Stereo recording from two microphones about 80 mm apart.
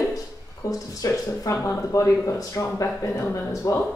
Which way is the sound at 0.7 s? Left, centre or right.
Left.